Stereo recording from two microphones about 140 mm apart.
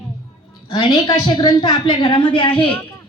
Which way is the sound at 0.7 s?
30° left (ahead or behind).